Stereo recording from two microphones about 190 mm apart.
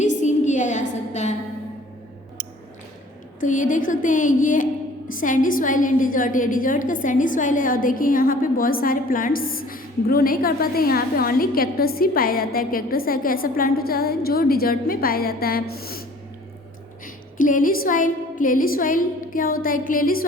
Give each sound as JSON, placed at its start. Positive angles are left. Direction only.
{"t": 0.0, "sound": "a sound", "side_deg": 40}
{"t": 3.4, "sound": "a woman's voice", "side_deg": 45}
{"t": 17.3, "sound": "a woman's voice", "side_deg": 45}